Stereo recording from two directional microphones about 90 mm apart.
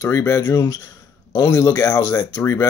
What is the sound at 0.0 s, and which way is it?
Speech, 30° left (ahead or behind).